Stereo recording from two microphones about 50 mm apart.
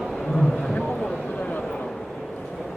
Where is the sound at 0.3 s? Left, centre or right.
Centre.